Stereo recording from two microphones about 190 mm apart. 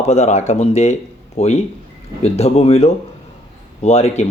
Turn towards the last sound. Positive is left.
turn(degrees=35)  # may be behind; listen again after turning